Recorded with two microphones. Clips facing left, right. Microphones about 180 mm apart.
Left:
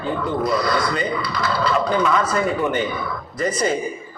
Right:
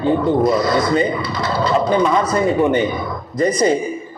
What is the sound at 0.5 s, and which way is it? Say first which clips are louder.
A man's voice: right 5 dB; 25° right (ahead or behind).